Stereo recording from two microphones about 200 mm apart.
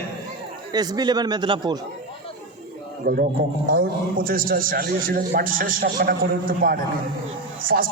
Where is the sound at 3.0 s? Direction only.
45° right (ahead or behind).